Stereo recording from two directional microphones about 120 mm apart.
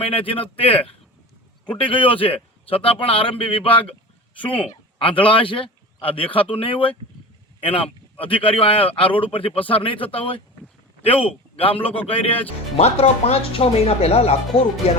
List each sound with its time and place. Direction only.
0.0 s speech: 50° left (ahead or behind)
4.9 s a man's voice: 45° left (ahead or behind)